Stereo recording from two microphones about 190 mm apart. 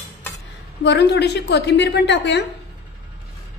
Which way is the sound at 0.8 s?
60° left (ahead or behind).